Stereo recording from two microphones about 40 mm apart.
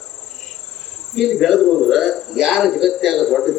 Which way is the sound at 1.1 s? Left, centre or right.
Centre.